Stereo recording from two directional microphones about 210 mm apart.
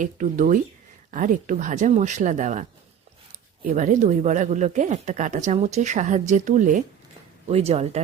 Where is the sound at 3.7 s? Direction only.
35° right (ahead or behind).